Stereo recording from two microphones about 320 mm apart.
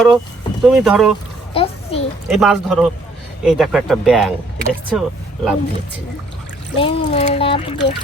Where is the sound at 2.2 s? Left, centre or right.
Centre.